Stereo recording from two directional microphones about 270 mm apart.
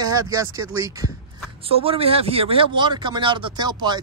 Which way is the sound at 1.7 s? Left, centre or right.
Right.